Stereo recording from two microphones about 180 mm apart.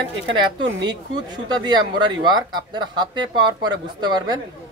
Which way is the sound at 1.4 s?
25° right (ahead or behind).